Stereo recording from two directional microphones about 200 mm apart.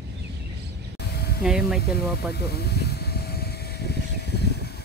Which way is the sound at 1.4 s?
Centre (ahead or behind).